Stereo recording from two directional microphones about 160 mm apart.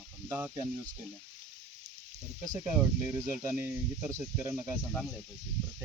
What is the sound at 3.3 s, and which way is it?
Speech, 10° right (ahead or behind).